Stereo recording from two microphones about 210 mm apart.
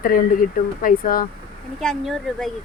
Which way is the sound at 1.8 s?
Centre (ahead or behind).